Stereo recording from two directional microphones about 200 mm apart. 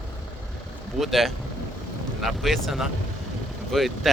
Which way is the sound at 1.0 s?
Centre (ahead or behind).